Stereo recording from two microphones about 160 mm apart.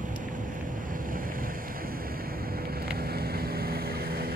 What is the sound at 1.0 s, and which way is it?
Boat, 60° right (ahead or behind).